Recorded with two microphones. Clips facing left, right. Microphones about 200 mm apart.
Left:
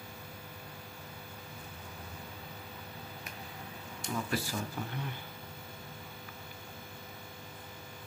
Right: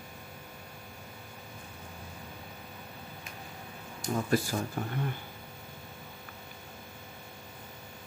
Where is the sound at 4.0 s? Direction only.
40° right (ahead or behind).